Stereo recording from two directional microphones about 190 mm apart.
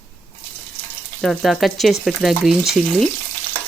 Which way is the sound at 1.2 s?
Centre (ahead or behind).